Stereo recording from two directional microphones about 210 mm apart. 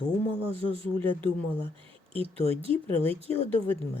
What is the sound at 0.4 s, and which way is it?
Speech, 25° right (ahead or behind).